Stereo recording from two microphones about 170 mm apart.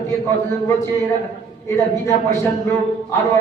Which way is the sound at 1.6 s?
15° left (ahead or behind).